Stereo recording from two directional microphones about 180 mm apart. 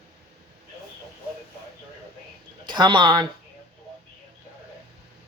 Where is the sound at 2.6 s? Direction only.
25° right (ahead or behind).